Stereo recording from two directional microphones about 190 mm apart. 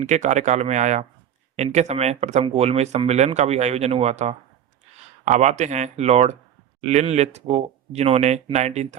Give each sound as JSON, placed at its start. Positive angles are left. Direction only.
{"t": 0.0, "sound": "speech", "side_deg": -40}